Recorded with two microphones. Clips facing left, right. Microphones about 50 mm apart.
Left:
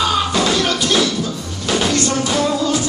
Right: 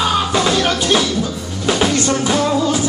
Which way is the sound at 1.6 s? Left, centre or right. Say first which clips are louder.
Right 2 dB; centre.